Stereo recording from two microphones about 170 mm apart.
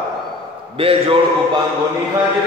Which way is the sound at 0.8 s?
35° right (ahead or behind).